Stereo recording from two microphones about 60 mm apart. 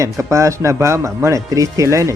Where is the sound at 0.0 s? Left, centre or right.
Right.